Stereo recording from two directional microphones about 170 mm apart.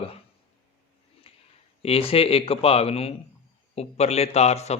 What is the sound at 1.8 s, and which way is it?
A man's voice, 35° left (ahead or behind).